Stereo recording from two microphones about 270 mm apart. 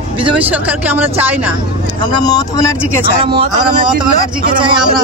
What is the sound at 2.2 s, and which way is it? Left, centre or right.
Speech, centre.